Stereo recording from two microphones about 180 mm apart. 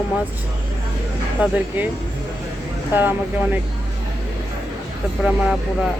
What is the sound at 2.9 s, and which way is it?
Speech, 10° right (ahead or behind).